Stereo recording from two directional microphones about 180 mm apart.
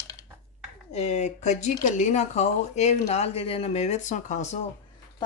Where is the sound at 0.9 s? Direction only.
40° left (ahead or behind).